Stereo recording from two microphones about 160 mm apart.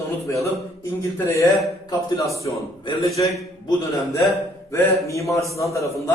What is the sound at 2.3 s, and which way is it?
A man's voice, 20° left (ahead or behind).